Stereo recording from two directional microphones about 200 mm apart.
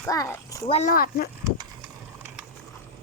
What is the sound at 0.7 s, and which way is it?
Speech, 35° left (ahead or behind).